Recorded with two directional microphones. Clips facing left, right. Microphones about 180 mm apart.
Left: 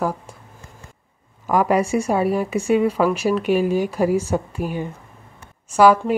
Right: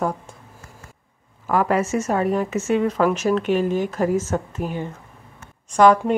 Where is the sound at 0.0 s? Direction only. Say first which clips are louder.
Left 1 dB; 5° left (ahead or behind).